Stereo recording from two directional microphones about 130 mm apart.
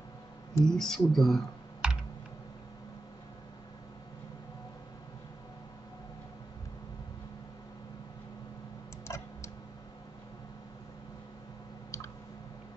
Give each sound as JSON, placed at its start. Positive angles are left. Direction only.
{"t": 0.7, "sound": "speech", "side_deg": 5}
{"t": 1.8, "sound": "computer keyboard", "side_deg": -10}
{"t": 9.0, "sound": "tick-tock", "side_deg": 20}